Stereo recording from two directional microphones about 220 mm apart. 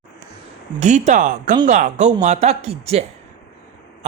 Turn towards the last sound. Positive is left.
turn(degrees=-30)  # may be behind; listen again after turning